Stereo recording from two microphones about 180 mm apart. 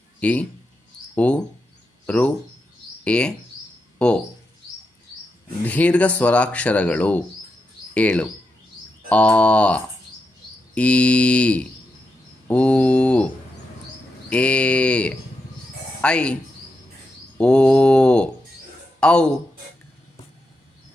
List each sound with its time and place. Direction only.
0.2 s speech: 5° left (ahead or behind)
5.6 s speech: 10° left (ahead or behind)
12.5 s mantra: 5° left (ahead or behind)
14.3 s speech: 5° left (ahead or behind)
17.3 s mantra: 5° left (ahead or behind)
18.9 s speech: 5° left (ahead or behind)